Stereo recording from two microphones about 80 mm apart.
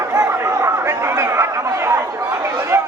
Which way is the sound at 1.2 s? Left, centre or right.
Right.